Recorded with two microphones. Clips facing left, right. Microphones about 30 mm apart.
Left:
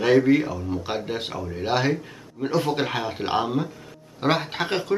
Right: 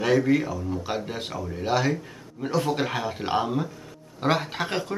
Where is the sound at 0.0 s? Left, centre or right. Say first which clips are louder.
Left 3 dB; centre.